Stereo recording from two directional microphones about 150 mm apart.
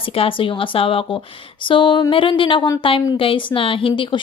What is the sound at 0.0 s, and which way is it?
A woman's voice, 40° left (ahead or behind).